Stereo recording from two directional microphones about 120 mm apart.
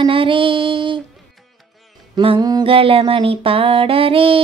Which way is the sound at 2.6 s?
50° right (ahead or behind).